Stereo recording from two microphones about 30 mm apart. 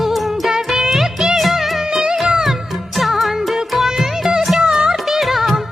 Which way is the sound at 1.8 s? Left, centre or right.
Centre.